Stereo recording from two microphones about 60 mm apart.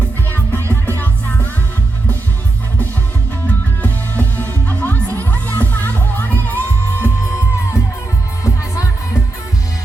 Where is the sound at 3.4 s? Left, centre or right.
Left.